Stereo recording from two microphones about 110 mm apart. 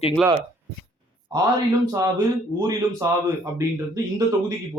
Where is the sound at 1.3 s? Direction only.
40° right (ahead or behind).